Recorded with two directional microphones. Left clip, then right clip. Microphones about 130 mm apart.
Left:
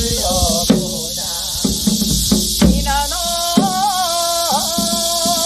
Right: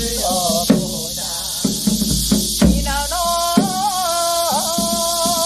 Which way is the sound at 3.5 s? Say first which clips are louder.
Left 2 dB; 30° left (ahead or behind).